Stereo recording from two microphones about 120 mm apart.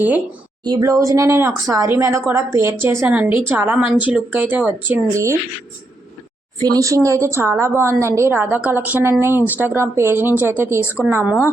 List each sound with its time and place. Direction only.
0.6 s a woman's voice: 30° right (ahead or behind); by 4.9 s 15° right (ahead or behind)
5.1 s a woman's voice: 25° right (ahead or behind)
6.6 s a woman's voice: 30° right (ahead or behind)